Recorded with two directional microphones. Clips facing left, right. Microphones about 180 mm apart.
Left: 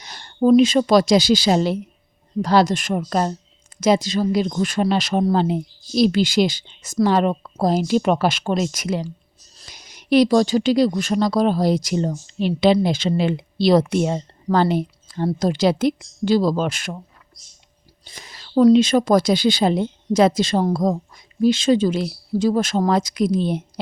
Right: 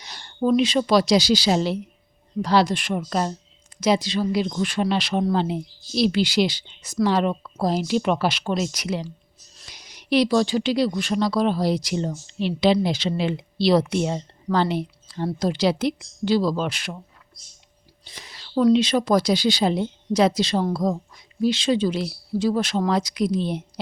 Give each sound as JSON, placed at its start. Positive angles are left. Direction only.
{"t": 0.0, "sound": "a woman's voice", "side_deg": 45}
{"t": 18.0, "sound": "speech", "side_deg": 45}